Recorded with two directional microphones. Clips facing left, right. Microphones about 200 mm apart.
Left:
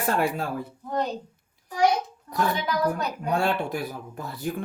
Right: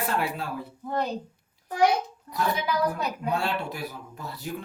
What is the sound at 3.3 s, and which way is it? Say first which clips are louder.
A man's voice: left 6 dB; 50° left (ahead or behind).